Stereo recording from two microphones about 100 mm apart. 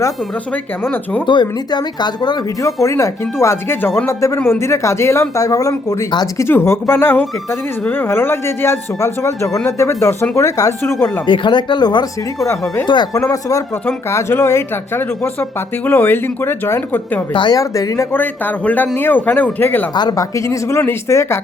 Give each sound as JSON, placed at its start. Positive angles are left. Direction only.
{"t": 1.3, "sound": "speech", "side_deg": 45}
{"t": 2.8, "sound": "speech", "side_deg": 30}
{"t": 6.4, "sound": "speech", "side_deg": 25}
{"t": 11.3, "sound": "speech", "side_deg": 50}
{"t": 13.1, "sound": "speech", "side_deg": 30}
{"t": 17.3, "sound": "speech", "side_deg": 50}
{"t": 17.6, "sound": "speech", "side_deg": 35}
{"t": 18.1, "sound": "a man's voice", "side_deg": 20}
{"t": 20.0, "sound": "speech", "side_deg": 45}
{"t": 20.3, "sound": "speech", "side_deg": 30}